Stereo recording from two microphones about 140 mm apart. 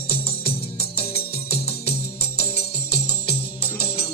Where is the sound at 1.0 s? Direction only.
40° left (ahead or behind).